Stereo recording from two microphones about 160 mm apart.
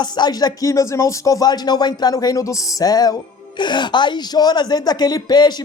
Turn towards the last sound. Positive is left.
turn(degrees=25)  # may be behind; listen again after turning